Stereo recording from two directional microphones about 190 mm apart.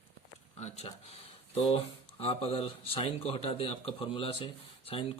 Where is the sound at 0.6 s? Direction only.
35° left (ahead or behind).